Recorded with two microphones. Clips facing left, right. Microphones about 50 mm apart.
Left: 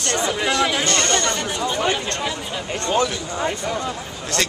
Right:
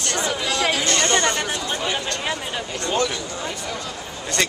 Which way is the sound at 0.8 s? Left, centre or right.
Centre.